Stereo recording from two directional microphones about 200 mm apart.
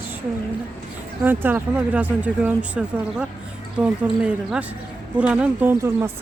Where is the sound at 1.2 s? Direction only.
10° right (ahead or behind).